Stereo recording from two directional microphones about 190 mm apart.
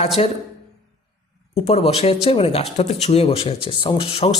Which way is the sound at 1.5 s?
35° left (ahead or behind).